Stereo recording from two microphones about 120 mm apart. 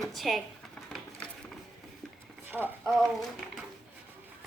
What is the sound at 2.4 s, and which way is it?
Clip-clop, 15° right (ahead or behind).